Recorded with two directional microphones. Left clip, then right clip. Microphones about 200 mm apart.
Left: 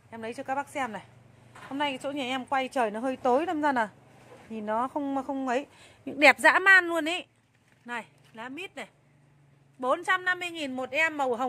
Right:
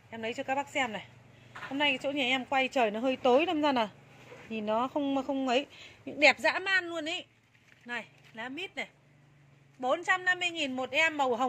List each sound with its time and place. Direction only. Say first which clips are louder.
0.1 s a woman's voice: even; centre (ahead or behind)
5.8 s speech: left 3 dB; 10° left (ahead or behind)
6.1 s a woman's voice: left 5 dB; 30° left (ahead or behind)
7.8 s speech: left 2 dB; 10° left (ahead or behind)
9.8 s a man's voice: left 2 dB; 25° left (ahead or behind); by 11.4 s 10° left (ahead or behind)